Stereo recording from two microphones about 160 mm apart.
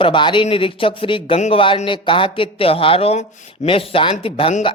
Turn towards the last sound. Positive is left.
turn(degrees=35)  # may be behind; listen again after turning